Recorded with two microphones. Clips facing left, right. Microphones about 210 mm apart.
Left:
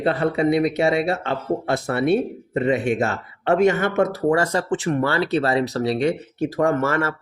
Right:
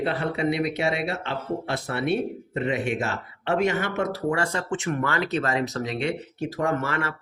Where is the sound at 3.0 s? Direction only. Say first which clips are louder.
Left 6 dB; 50° left (ahead or behind).